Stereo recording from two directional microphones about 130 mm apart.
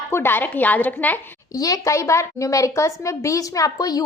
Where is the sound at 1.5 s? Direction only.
25° left (ahead or behind).